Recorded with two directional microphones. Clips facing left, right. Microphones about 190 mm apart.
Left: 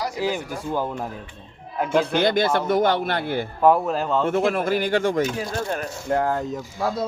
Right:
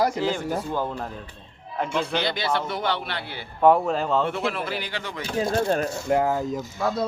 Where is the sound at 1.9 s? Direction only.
50° left (ahead or behind).